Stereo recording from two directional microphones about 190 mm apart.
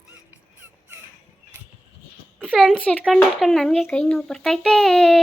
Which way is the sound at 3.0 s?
Centre (ahead or behind).